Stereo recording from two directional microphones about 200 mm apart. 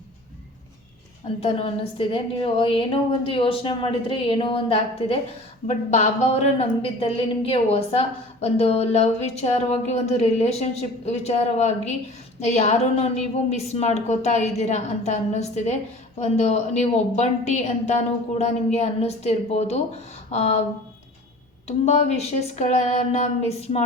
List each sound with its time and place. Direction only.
1.4 s a woman's voice: 30° left (ahead or behind)
21.7 s a woman's voice: 35° left (ahead or behind)